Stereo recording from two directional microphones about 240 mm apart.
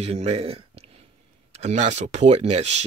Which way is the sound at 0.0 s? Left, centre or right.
Right.